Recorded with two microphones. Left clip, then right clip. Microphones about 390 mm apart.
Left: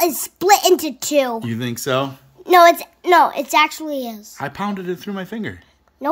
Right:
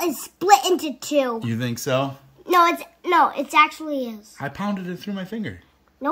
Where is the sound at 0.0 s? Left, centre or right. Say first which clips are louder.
Left 6 dB; left.